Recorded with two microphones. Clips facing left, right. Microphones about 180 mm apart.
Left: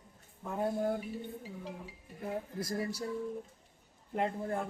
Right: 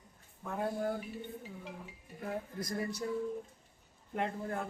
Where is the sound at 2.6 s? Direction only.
25° left (ahead or behind).